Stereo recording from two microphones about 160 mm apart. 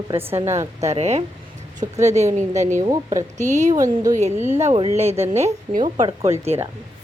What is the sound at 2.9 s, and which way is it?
Speech, 25° right (ahead or behind).